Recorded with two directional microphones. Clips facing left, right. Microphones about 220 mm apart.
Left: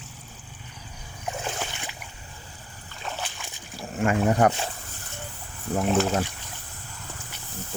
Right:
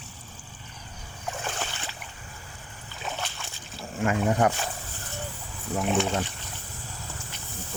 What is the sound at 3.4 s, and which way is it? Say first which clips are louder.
Splash: left 1 dB; 15° left (ahead or behind).